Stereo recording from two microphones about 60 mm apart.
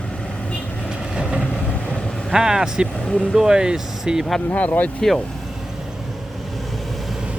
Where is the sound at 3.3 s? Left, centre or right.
Centre.